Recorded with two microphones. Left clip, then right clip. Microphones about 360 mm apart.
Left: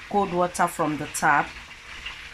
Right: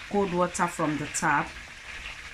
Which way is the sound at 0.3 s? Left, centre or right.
Centre.